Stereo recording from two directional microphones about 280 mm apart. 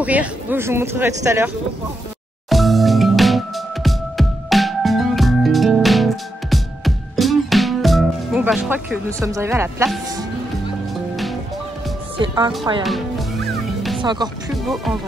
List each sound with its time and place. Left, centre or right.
0.0 s speech: centre
2.5 s music: centre
12.2 s speech: centre
13.9 s speech: centre
14.5 s speech: centre